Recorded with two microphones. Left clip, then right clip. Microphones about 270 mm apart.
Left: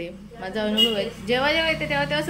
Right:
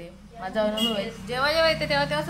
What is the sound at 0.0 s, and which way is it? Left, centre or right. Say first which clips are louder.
Speech: left 3 dB; right.